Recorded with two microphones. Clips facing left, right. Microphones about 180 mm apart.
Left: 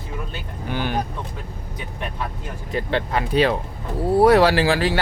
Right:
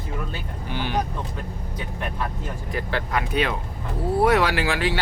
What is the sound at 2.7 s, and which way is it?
Speech, 25° left (ahead or behind).